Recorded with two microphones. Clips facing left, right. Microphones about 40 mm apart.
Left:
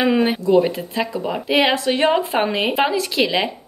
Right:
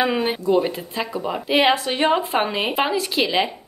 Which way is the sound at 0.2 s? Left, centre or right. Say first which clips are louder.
Left 4 dB; centre.